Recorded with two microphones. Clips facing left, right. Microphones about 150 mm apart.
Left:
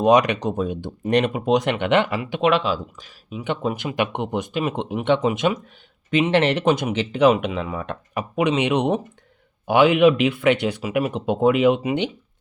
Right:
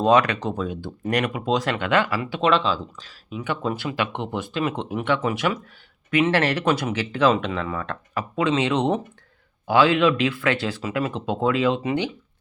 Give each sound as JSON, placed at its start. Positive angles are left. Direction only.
{"t": 0.0, "sound": "speech", "side_deg": 15}